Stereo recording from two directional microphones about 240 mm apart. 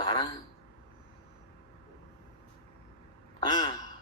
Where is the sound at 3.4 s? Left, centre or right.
Centre.